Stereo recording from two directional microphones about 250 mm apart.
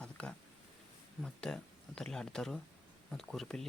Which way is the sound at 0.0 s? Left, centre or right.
Centre.